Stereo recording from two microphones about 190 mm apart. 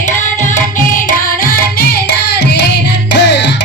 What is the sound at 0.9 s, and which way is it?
Carnatic music, 45° left (ahead or behind).